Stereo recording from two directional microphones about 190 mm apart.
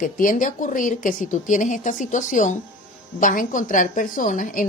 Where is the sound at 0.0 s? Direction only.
45° left (ahead or behind).